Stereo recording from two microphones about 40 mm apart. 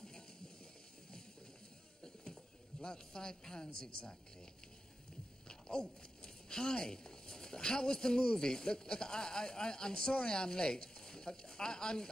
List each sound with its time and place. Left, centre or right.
2.8 s a woman's voice: centre
5.5 s speech: centre